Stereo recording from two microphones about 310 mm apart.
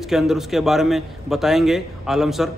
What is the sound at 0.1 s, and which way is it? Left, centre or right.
A man's voice, centre.